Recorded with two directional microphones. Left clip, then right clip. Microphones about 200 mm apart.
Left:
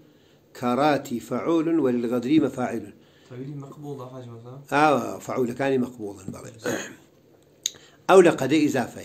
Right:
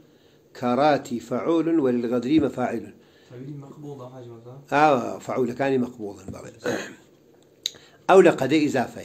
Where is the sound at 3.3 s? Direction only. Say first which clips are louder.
Left 3 dB; 40° left (ahead or behind).